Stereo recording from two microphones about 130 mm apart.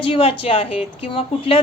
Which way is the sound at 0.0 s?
45° left (ahead or behind).